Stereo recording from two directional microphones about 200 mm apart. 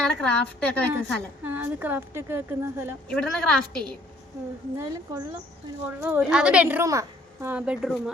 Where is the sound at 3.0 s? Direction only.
5° left (ahead or behind).